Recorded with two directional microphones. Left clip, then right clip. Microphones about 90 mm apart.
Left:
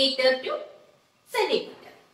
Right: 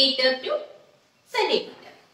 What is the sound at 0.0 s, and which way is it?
Speech, 40° right (ahead or behind).